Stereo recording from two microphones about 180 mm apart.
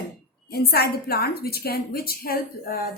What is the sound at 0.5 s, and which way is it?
A woman's voice, 60° left (ahead or behind).